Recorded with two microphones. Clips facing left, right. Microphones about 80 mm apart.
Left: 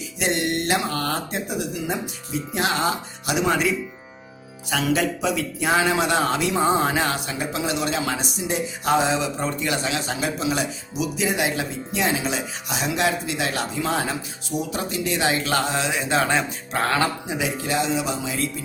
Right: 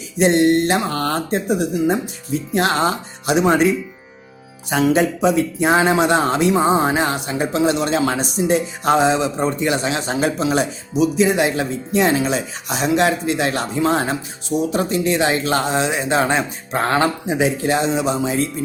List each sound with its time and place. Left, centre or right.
0.2 s speech: right
4.7 s speech: right